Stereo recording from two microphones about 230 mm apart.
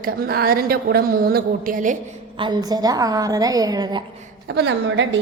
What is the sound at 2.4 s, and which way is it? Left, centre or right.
A woman's voice, centre.